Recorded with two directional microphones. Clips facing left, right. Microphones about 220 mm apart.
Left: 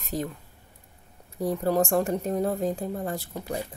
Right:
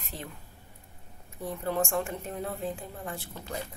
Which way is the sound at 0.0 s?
40° left (ahead or behind).